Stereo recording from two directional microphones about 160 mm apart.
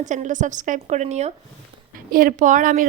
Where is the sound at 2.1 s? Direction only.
60° right (ahead or behind).